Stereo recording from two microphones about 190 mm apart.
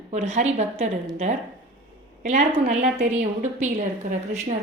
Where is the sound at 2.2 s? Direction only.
40° right (ahead or behind).